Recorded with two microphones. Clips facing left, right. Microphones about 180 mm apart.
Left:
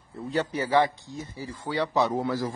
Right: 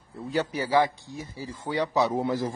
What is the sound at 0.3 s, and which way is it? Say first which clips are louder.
Speech: even; 5° right (ahead or behind).